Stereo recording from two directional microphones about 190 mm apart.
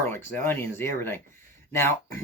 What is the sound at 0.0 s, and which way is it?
Speech, 10° left (ahead or behind).